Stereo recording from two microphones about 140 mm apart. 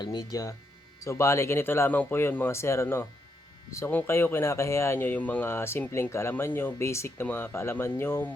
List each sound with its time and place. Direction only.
0.0 s speech: 30° left (ahead or behind)